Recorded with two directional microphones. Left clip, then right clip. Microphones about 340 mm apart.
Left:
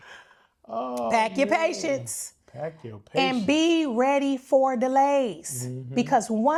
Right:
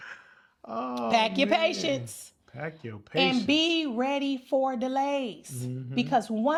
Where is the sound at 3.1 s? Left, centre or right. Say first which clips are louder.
Left 1 dB; left.